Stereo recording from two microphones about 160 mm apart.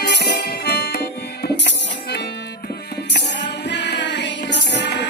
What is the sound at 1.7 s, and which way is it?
Music, 90° left.